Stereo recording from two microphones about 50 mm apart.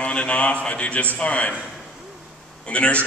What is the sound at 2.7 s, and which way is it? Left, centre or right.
Speech, left.